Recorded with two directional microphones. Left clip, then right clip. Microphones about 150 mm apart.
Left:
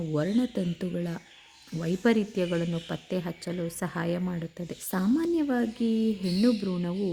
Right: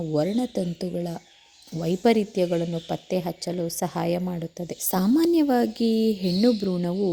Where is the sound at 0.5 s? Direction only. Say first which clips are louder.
Right 4 dB; 10° right (ahead or behind).